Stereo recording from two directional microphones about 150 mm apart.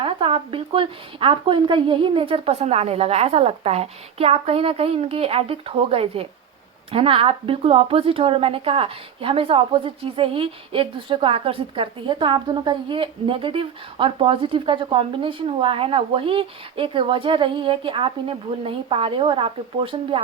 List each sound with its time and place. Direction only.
0.0 s a woman's voice: 35° right (ahead or behind)